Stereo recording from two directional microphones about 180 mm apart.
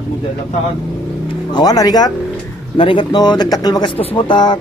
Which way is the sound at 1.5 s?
20° left (ahead or behind).